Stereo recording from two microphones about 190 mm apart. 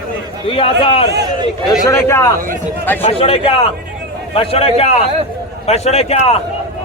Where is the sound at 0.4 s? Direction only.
30° left (ahead or behind).